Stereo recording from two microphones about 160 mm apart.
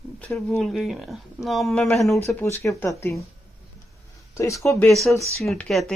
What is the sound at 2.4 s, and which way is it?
Speech, 20° left (ahead or behind).